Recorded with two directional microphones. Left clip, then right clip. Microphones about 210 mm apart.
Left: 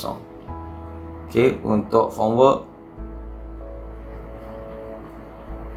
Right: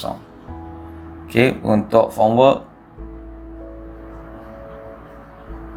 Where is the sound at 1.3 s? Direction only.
30° right (ahead or behind).